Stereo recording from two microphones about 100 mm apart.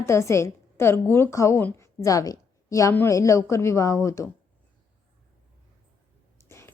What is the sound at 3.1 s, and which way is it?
Speech, 30° left (ahead or behind).